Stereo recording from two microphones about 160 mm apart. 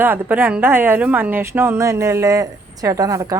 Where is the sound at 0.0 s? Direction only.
10° right (ahead or behind).